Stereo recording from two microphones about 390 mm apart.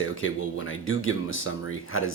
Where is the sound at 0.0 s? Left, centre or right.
Left.